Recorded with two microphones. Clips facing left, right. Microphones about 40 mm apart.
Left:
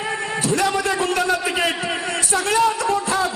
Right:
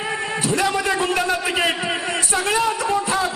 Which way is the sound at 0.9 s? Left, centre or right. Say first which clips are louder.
Even; right.